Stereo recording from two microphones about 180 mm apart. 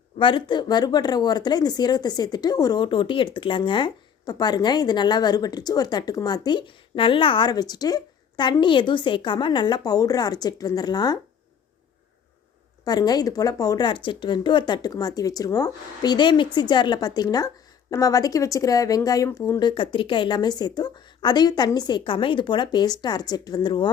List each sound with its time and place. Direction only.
0.2 s speech: 25° left (ahead or behind)
12.8 s speech: 20° left (ahead or behind)